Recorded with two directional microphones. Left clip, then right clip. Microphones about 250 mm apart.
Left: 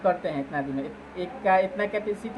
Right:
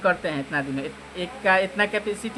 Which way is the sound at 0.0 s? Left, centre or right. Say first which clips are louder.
Right 2 dB; right.